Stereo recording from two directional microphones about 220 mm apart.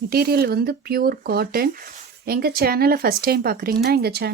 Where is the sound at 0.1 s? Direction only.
45° right (ahead or behind).